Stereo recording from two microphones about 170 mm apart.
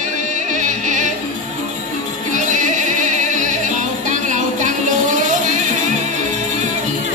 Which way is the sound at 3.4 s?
50° right (ahead or behind).